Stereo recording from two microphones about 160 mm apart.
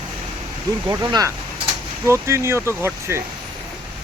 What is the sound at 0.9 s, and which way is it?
Speech, 25° right (ahead or behind).